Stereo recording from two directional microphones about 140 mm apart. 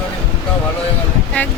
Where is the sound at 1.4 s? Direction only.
10° left (ahead or behind).